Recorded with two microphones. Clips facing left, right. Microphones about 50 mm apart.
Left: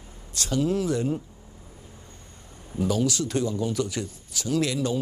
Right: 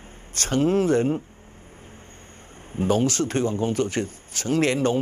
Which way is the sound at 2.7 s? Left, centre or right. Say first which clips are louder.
Right 3 dB; right.